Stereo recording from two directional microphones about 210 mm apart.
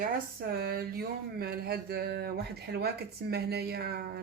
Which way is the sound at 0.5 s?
45° right (ahead or behind).